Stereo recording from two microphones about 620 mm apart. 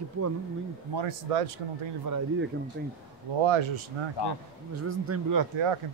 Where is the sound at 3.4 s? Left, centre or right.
Right.